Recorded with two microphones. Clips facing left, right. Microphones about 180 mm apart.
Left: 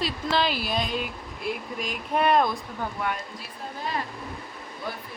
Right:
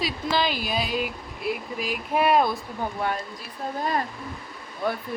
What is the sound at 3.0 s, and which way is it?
Speech, 30° right (ahead or behind).